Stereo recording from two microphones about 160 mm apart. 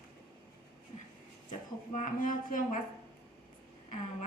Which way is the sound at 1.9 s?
55° left (ahead or behind).